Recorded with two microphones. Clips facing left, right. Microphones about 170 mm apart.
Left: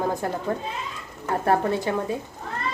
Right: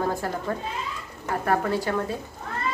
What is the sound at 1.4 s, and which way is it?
Speech, 25° left (ahead or behind).